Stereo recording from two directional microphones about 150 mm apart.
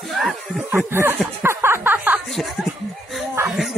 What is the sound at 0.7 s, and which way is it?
Snicker, 15° right (ahead or behind).